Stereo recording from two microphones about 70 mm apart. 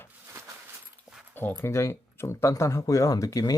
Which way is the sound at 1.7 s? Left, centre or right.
Left.